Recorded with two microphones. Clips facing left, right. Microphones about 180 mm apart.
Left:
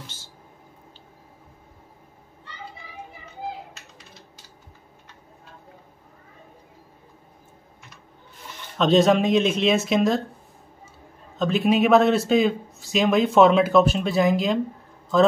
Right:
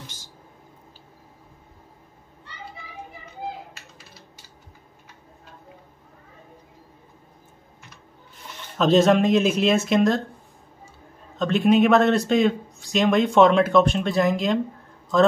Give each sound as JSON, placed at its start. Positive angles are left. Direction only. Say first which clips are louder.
{"t": 0.0, "sound": "a sound", "louder": "even", "side_deg": -15}
{"t": 8.7, "sound": "speech", "louder": "right 1 dB", "side_deg": 0}
{"t": 11.3, "sound": "speech", "louder": "right 2 dB", "side_deg": 0}